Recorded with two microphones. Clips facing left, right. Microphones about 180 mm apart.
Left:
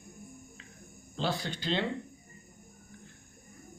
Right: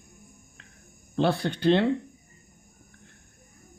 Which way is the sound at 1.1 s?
60° right (ahead or behind).